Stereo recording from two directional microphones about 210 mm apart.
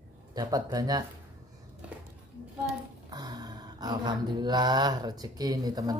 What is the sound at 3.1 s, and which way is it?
Mantra, 20° right (ahead or behind).